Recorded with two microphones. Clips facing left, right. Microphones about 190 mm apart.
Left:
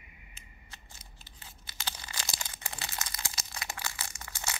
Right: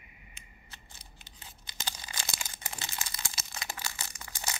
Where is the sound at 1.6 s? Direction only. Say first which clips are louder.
Even; 20° right (ahead or behind).